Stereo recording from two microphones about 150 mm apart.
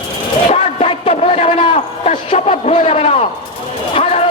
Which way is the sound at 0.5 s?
40° left (ahead or behind).